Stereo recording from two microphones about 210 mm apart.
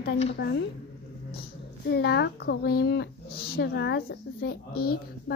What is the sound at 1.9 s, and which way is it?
Speech, 50° left (ahead or behind).